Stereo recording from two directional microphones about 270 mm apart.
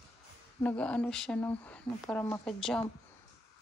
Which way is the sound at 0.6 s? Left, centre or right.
Centre.